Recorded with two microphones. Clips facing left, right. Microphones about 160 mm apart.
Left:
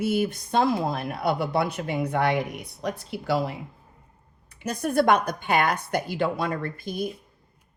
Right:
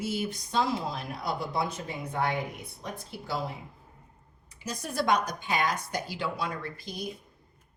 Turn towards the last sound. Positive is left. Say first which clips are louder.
# left 8 dB
turn(degrees=55)  # may be behind; listen again after turning